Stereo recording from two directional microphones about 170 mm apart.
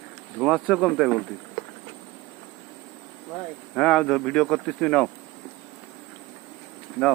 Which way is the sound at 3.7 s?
Centre (ahead or behind).